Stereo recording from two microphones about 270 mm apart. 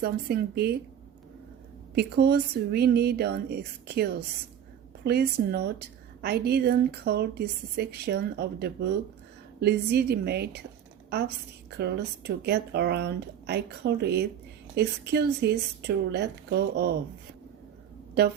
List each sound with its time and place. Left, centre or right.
0.0 s a woman's voice: right
2.0 s a woman's voice: right
18.2 s a woman's voice: right